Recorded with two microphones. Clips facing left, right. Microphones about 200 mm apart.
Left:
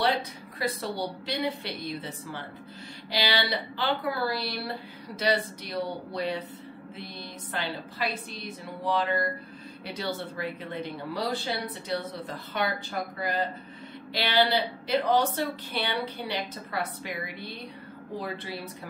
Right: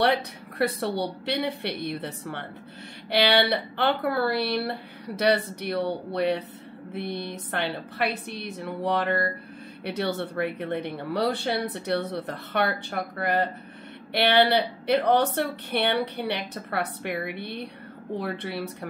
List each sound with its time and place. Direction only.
0.1 s speech: 60° right (ahead or behind)